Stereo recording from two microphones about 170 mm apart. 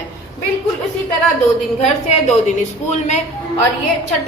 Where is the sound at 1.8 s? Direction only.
40° left (ahead or behind).